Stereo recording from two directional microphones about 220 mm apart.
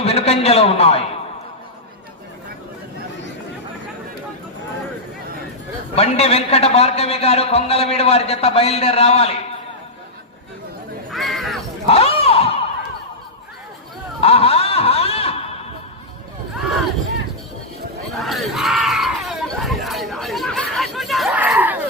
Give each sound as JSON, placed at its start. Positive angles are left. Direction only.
{"t": 0.0, "sound": "a man's voice", "side_deg": 30}
{"t": 6.0, "sound": "a man's voice", "side_deg": 30}
{"t": 11.1, "sound": "crow", "side_deg": 0}
{"t": 11.9, "sound": "crowd", "side_deg": 25}
{"t": 14.2, "sound": "a sound", "side_deg": 25}
{"t": 18.1, "sound": "screaming", "side_deg": 0}